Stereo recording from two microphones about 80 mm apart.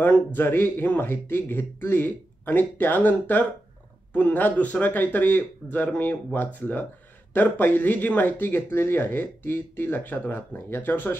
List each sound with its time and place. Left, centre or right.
0.0 s speech: left